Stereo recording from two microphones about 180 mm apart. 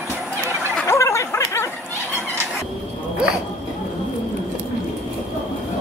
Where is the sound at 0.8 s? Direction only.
15° left (ahead or behind).